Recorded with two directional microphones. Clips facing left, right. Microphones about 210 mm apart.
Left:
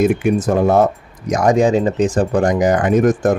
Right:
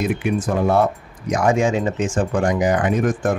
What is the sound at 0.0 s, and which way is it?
Speech, 45° left (ahead or behind).